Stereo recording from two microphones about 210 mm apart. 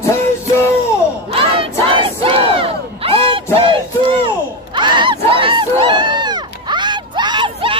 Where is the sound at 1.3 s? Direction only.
25° right (ahead or behind).